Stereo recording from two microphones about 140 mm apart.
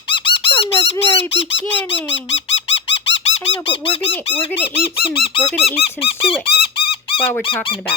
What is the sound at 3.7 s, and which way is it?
Speech, 40° left (ahead or behind).